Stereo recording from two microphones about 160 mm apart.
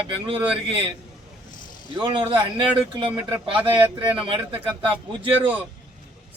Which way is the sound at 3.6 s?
10° right (ahead or behind).